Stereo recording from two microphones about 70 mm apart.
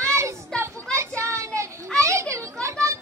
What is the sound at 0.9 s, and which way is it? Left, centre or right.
Children playing, right.